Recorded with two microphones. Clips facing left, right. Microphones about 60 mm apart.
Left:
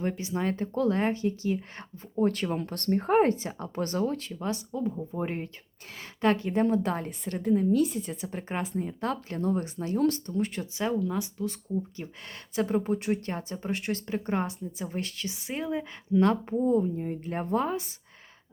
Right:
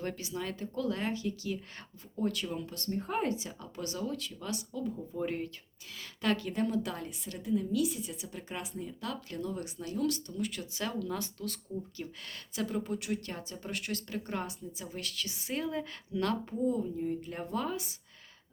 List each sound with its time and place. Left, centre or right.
0.0 s a woman's voice: left
11.9 s a woman's voice: left